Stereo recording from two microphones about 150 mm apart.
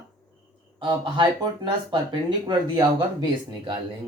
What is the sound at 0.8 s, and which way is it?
Speech, 30° right (ahead or behind).